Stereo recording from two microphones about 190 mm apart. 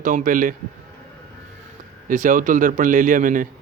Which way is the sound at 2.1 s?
45° right (ahead or behind).